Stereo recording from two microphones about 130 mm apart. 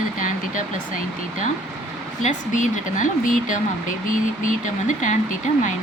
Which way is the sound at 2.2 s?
75° left (ahead or behind).